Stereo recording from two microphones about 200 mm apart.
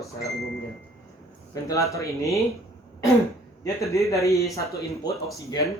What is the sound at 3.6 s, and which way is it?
Speech, 15° left (ahead or behind).